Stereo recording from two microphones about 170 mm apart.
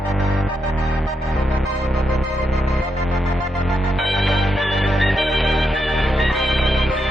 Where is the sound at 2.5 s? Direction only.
Centre (ahead or behind).